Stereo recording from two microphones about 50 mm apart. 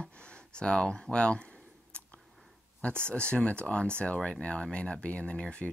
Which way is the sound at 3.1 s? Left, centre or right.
Left.